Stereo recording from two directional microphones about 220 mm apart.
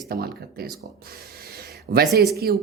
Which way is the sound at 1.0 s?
45° right (ahead or behind).